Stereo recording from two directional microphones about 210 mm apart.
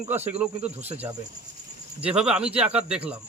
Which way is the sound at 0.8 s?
30° right (ahead or behind).